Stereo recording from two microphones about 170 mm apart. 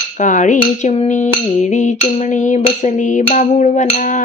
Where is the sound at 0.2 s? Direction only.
50° left (ahead or behind).